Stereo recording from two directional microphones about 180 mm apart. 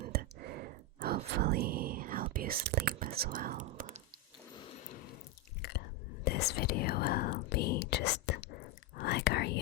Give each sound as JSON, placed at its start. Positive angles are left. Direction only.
{"t": 0.0, "sound": "whispering", "side_deg": -55}
{"t": 5.6, "sound": "whispering", "side_deg": 60}
{"t": 6.2, "sound": "speech", "side_deg": 60}